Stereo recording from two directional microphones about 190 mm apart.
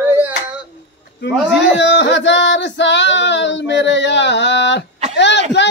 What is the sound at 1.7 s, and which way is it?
Female singing, 70° left (ahead or behind).